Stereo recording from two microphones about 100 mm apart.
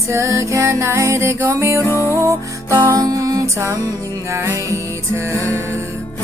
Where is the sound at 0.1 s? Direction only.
30° right (ahead or behind).